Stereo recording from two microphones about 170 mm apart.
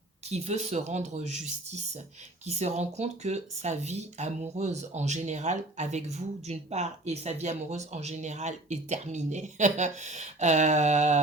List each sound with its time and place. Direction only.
0.3 s speech: 40° right (ahead or behind)